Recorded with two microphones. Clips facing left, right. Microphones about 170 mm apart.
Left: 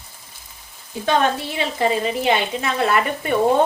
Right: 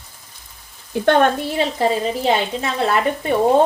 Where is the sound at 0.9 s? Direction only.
60° right (ahead or behind).